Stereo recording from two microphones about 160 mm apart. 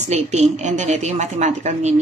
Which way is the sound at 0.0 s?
45° right (ahead or behind).